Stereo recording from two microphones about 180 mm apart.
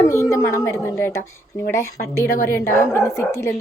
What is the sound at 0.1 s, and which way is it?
A woman's voice, 15° left (ahead or behind).